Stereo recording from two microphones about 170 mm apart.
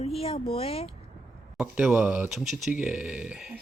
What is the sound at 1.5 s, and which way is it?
Speech, 10° right (ahead or behind).